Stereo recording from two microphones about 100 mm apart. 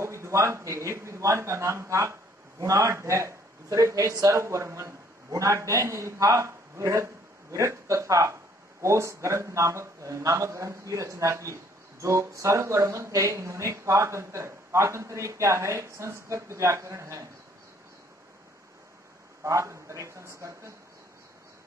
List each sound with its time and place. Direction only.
0.0 s a man's voice: 30° right (ahead or behind)
19.4 s a man's voice: 30° right (ahead or behind)